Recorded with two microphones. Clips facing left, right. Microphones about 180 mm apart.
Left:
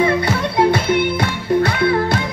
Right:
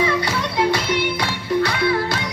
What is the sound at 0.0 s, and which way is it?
Music, 55° left (ahead or behind).